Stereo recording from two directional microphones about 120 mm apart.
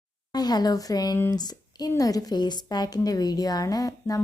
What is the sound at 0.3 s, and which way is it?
A woman's voice, 35° left (ahead or behind).